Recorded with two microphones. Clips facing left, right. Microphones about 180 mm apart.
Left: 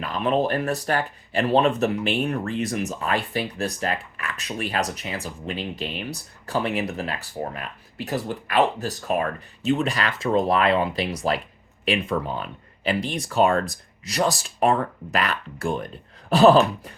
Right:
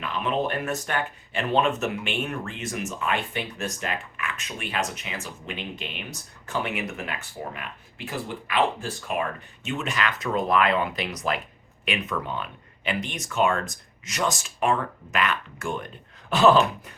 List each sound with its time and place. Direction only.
0.0 s speech: 40° left (ahead or behind)